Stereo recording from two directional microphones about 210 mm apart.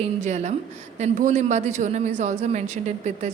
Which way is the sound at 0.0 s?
35° right (ahead or behind).